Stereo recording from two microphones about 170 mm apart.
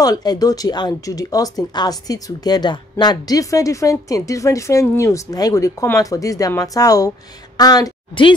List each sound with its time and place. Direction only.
0.0 s a woman's voice: 20° left (ahead or behind)